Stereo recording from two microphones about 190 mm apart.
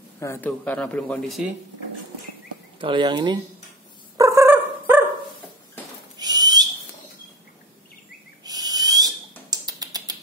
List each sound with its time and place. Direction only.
0.2 s speech: 10° left (ahead or behind)
2.8 s speech: 25° right (ahead or behind)
4.2 s dog: 15° right (ahead or behind)
6.1 s owl: 20° right (ahead or behind)
8.5 s owl: 20° right (ahead or behind)
9.5 s a sound: 20° right (ahead or behind)